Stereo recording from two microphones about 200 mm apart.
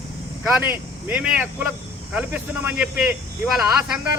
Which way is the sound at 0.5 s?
10° right (ahead or behind).